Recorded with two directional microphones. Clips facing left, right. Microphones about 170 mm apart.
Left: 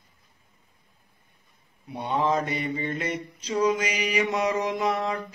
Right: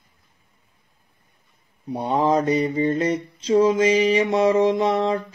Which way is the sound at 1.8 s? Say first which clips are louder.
Right 5 dB; 35° right (ahead or behind).